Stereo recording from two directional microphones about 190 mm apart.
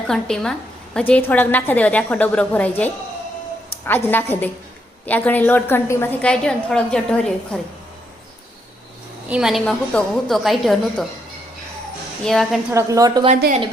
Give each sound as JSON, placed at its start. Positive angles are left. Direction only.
{"t": 0.1, "sound": "a woman's voice", "side_deg": 5}
{"t": 9.3, "sound": "a woman's voice", "side_deg": 0}
{"t": 12.2, "sound": "a woman's voice", "side_deg": 0}
{"t": 12.7, "sound": "a woman's voice", "side_deg": -20}